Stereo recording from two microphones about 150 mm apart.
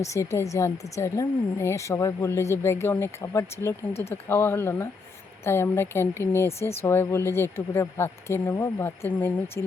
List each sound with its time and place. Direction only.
0.0 s speech: 20° left (ahead or behind)